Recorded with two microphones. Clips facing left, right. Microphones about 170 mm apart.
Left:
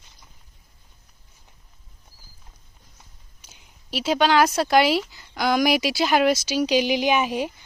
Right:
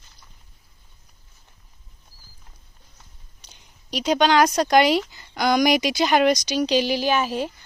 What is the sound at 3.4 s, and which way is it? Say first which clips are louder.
A woman's voice: even; 5° left (ahead or behind).